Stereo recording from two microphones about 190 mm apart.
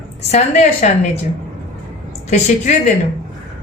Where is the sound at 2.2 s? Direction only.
35° left (ahead or behind).